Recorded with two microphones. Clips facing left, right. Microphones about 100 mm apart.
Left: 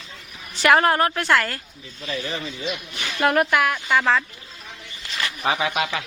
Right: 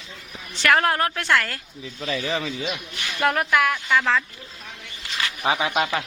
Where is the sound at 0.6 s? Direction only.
5° left (ahead or behind).